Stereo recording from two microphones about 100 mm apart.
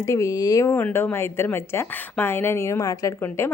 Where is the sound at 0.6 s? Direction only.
20° left (ahead or behind).